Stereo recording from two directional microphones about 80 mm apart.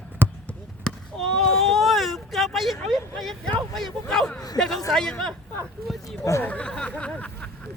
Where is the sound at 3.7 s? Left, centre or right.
Centre.